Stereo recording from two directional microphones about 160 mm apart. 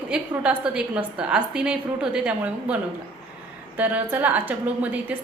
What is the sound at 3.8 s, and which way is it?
A woman's voice, 10° right (ahead or behind).